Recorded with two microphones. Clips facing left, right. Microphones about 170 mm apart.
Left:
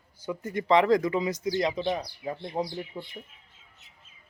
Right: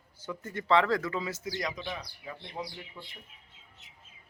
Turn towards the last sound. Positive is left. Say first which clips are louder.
# left 9 dB
turn(degrees=30)  # may be behind; listen again after turning